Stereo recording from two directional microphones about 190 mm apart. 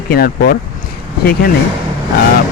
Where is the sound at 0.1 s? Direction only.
50° left (ahead or behind).